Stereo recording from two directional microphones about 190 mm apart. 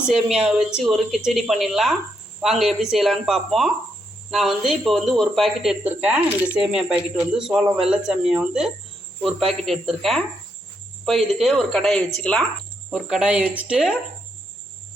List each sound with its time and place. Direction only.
0.1 s speech: 5° right (ahead or behind)